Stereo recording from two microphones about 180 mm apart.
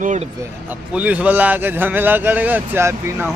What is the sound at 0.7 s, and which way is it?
A man's voice, 10° right (ahead or behind).